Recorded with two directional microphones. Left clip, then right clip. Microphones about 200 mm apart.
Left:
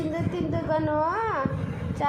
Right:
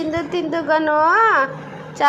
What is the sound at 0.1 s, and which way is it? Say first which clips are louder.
A woman's voice: right 8 dB; 15° right (ahead or behind).